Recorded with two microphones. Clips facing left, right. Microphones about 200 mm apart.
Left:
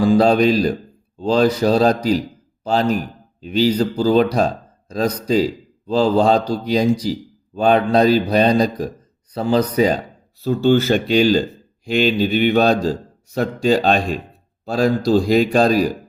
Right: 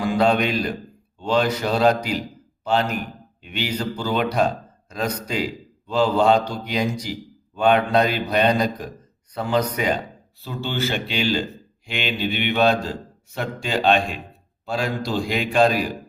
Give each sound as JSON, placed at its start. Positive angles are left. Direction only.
{"t": 0.0, "sound": "a man's voice", "side_deg": 35}